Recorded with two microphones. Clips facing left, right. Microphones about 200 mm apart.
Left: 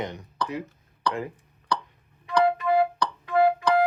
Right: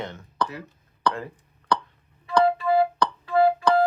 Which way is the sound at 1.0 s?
55° right (ahead or behind).